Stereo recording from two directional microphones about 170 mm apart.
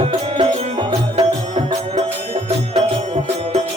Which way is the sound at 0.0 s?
30° right (ahead or behind).